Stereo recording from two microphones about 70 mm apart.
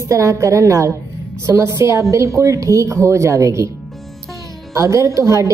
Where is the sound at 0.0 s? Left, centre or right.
Right.